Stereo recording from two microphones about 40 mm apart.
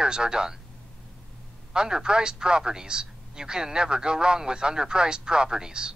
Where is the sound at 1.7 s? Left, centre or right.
Centre.